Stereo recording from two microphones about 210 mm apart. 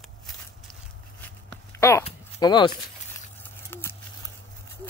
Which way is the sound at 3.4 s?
10° left (ahead or behind).